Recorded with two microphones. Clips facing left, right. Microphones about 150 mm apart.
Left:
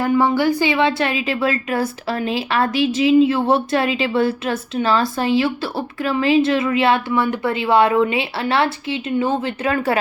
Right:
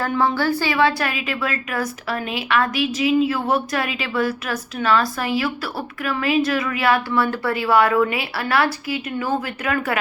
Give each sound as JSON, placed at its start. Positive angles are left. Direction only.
{"t": 0.1, "sound": "a woman's voice", "side_deg": 10}